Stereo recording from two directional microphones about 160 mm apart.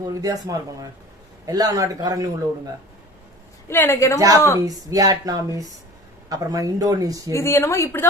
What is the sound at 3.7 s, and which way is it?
Speech, 15° left (ahead or behind).